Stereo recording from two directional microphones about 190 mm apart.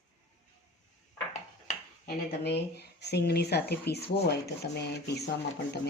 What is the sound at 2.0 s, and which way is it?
Speech, 60° left (ahead or behind).